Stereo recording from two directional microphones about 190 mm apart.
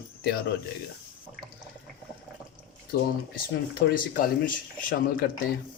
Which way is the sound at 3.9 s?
45° left (ahead or behind).